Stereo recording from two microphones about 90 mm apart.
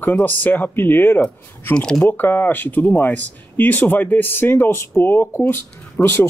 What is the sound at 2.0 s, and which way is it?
Speech, 25° left (ahead or behind).